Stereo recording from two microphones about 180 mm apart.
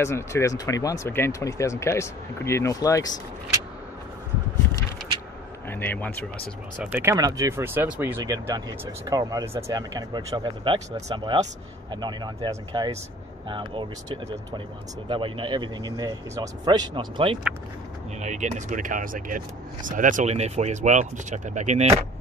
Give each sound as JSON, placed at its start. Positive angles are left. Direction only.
{"t": 0.0, "sound": "speech", "side_deg": 15}
{"t": 5.7, "sound": "speech", "side_deg": 10}
{"t": 6.8, "sound": "speech", "side_deg": -10}
{"t": 18.2, "sound": "speech", "side_deg": -40}